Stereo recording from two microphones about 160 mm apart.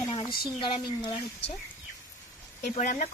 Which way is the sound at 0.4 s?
30° left (ahead or behind).